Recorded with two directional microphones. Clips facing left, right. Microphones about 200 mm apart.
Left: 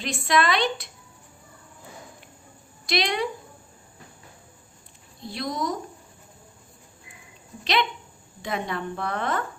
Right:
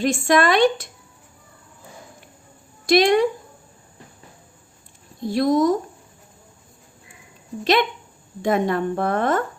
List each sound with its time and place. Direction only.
0.0 s a woman's voice: 50° right (ahead or behind)
2.8 s a woman's voice: 45° right (ahead or behind)
5.2 s a woman's voice: 50° right (ahead or behind)
7.6 s a woman's voice: 50° right (ahead or behind)